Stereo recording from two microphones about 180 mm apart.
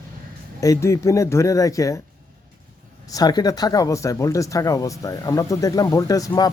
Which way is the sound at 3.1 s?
20° left (ahead or behind).